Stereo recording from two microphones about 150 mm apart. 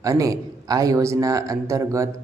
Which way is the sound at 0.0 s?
20° right (ahead or behind).